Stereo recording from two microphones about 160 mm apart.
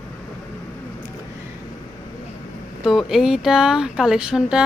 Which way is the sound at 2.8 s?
Centre (ahead or behind).